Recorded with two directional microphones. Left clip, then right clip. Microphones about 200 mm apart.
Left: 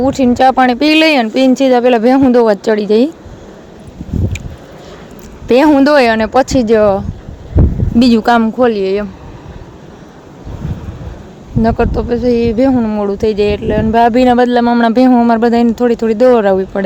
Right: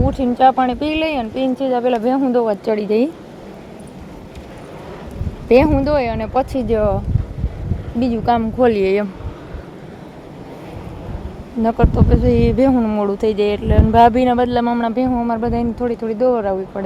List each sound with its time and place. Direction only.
0.0 s speech: 30° left (ahead or behind)
5.5 s speech: 40° left (ahead or behind)
8.5 s speech: 5° left (ahead or behind)
11.6 s speech: 15° left (ahead or behind); by 16.8 s 30° left (ahead or behind)